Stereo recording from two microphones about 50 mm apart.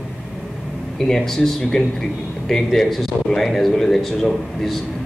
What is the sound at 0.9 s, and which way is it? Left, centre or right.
A man's voice, centre.